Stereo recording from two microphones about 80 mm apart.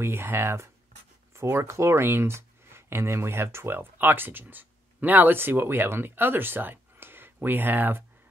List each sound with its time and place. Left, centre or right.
0.0 s speech: right